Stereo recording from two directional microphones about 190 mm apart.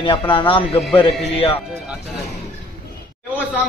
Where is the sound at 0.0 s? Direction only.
25° left (ahead or behind).